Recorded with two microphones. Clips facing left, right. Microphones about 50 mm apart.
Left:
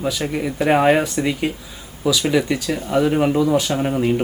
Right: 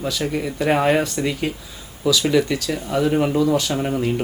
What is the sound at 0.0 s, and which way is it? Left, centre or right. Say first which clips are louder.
Speech: left 1 dB; centre.